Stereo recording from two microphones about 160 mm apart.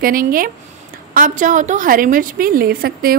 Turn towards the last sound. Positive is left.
turn(degrees=-70)  # may be behind; listen again after turning